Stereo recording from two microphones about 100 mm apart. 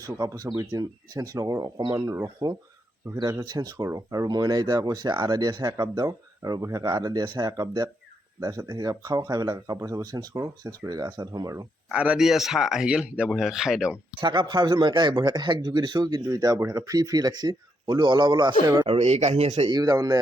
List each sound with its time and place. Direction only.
0.0 s speech: 40° right (ahead or behind)
11.9 s a man's voice: 10° right (ahead or behind)
14.2 s a man's voice: 50° right (ahead or behind)
18.9 s speech: 90° right
19.7 s speech: 35° right (ahead or behind)